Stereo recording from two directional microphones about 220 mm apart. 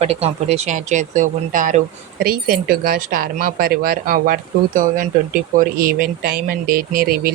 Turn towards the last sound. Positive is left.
turn(degrees=-40)  # may be behind; listen again after turning